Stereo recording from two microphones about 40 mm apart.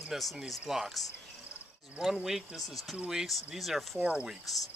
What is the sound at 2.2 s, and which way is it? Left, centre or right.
Speech, centre.